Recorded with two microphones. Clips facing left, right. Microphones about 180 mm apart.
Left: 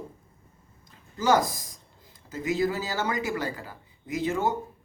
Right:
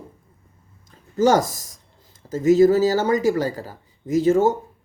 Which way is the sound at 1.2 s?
45° right (ahead or behind).